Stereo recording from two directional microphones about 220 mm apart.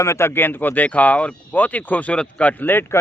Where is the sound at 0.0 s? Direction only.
10° left (ahead or behind).